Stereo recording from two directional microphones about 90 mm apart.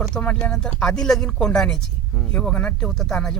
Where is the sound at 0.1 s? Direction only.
15° left (ahead or behind).